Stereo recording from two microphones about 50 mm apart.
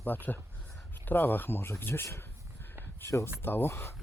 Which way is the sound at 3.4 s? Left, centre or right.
Left.